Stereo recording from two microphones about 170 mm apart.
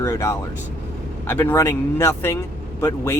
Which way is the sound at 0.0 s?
15° left (ahead or behind).